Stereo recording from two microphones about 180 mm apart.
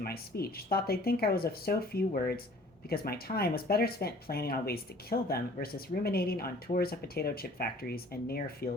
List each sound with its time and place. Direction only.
0.0 s speech: 60° left (ahead or behind)